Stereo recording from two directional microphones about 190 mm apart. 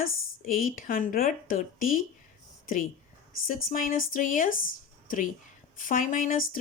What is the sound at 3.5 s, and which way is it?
Speech, 45° left (ahead or behind).